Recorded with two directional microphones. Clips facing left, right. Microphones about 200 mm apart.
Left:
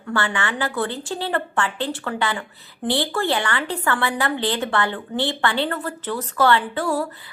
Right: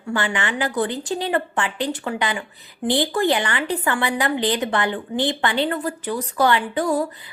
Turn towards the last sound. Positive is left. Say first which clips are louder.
# right 1 dB
turn(degrees=-15)  # may be behind; listen again after turning